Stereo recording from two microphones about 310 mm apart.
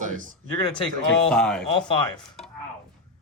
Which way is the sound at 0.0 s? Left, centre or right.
Right.